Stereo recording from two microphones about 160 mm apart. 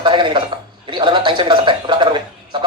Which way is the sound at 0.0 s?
30° right (ahead or behind).